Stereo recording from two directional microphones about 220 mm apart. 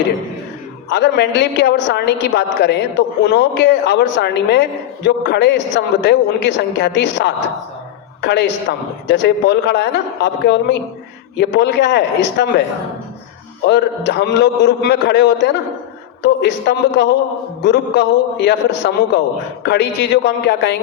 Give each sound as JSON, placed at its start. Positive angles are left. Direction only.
{"t": 0.9, "sound": "a man's voice", "side_deg": 55}
{"t": 13.7, "sound": "a man's voice", "side_deg": 50}